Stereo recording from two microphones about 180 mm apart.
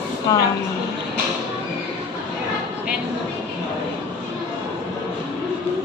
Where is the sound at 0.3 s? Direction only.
20° left (ahead or behind).